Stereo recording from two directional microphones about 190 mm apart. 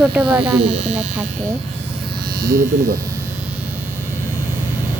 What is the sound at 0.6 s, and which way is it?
Speech, 35° right (ahead or behind).